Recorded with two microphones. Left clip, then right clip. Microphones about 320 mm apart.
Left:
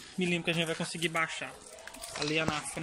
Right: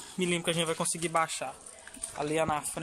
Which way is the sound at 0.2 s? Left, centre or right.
Right.